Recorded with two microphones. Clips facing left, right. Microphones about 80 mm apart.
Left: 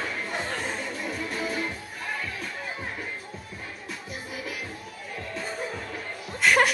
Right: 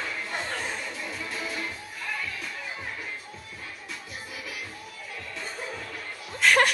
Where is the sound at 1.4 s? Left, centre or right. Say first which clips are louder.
Left 5 dB; left.